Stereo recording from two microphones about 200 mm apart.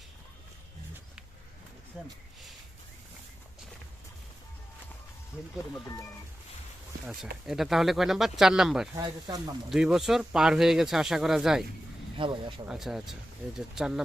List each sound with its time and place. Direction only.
2.0 s speech: 5° right (ahead or behind)
7.4 s speech: centre (ahead or behind)
9.0 s speech: 20° right (ahead or behind)
9.6 s speech: centre (ahead or behind)
12.1 s speech: 25° right (ahead or behind)
12.6 s speech: centre (ahead or behind)